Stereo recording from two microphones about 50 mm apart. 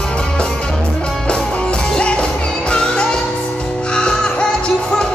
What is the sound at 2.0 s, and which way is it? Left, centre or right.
Music, left.